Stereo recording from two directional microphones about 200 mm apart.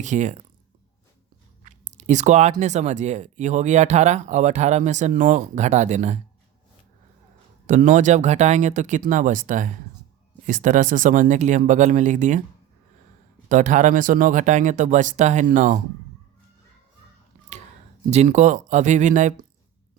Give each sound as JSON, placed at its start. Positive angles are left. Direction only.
{"t": 0.0, "sound": "speech", "side_deg": -35}
{"t": 1.6, "sound": "speech", "side_deg": -35}
{"t": 7.7, "sound": "speech", "side_deg": -40}
{"t": 13.5, "sound": "speech", "side_deg": -40}
{"t": 18.1, "sound": "speech", "side_deg": -35}